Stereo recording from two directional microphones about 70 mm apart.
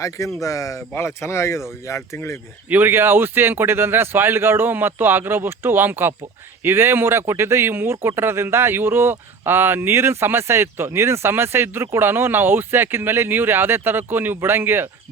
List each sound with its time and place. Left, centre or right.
0.0 s speech: left
2.6 s speech: right